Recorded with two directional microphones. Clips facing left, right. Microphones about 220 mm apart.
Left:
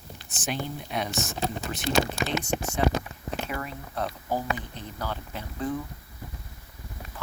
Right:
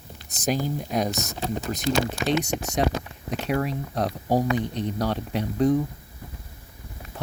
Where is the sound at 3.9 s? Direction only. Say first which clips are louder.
Right 6 dB; 35° right (ahead or behind).